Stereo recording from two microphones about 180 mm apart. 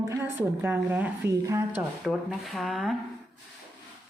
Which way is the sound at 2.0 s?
Centre (ahead or behind).